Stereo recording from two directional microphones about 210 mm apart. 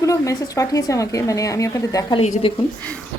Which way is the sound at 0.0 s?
15° left (ahead or behind).